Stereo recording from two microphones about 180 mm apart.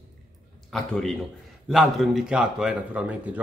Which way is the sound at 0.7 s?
Centre (ahead or behind).